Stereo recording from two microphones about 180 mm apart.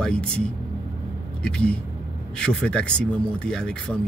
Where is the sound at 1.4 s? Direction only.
5° left (ahead or behind).